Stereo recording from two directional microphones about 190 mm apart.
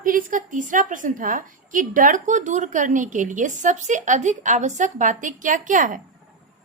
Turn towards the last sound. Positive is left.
turn(degrees=-45)  # may be behind; listen again after turning